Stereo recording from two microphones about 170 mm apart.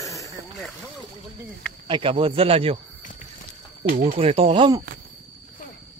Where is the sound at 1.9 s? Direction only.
30° right (ahead or behind).